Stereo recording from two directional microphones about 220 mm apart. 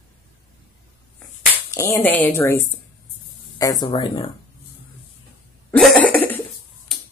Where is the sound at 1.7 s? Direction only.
10° left (ahead or behind).